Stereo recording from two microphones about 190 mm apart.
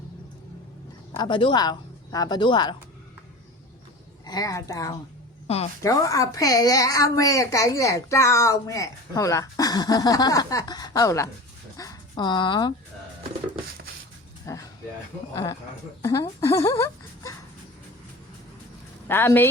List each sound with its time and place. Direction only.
1.1 s speech: 25° left (ahead or behind)
4.3 s a child's voice: 20° left (ahead or behind)
5.5 s speech: 30° left (ahead or behind)
5.8 s a child's voice: 15° left (ahead or behind)
14.4 s a sound: 15° left (ahead or behind)
16.0 s speech: 20° left (ahead or behind)
16.4 s a sound: 15° left (ahead or behind)
19.0 s speech: 10° left (ahead or behind)